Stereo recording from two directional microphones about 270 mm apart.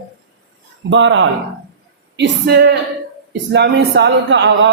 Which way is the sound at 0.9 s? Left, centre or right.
Right.